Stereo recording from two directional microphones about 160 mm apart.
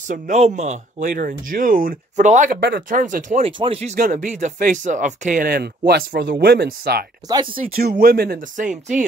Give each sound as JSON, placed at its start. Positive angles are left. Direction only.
{"t": 0.1, "sound": "speech", "side_deg": -50}
{"t": 2.6, "sound": "speech", "side_deg": -65}
{"t": 3.4, "sound": "speech", "side_deg": -35}
{"t": 3.9, "sound": "speech", "side_deg": -55}